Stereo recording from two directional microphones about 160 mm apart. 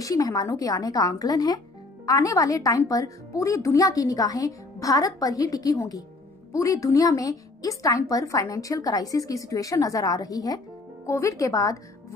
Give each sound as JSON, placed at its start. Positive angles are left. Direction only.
{"t": 0.0, "sound": "a woman's voice", "side_deg": 20}